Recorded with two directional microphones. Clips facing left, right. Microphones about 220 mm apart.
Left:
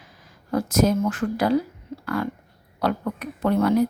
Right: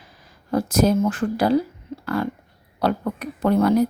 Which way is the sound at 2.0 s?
30° right (ahead or behind).